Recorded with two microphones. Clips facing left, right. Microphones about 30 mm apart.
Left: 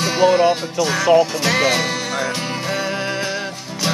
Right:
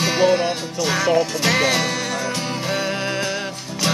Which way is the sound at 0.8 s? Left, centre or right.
Centre.